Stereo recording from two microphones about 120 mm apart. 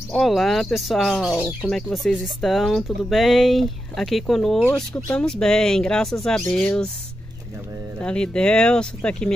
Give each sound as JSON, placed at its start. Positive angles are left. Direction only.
{"t": 0.1, "sound": "speech", "side_deg": 0}
{"t": 8.0, "sound": "speech", "side_deg": 10}